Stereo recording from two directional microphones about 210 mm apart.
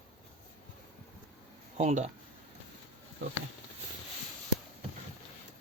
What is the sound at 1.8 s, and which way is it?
Speech, 35° right (ahead or behind).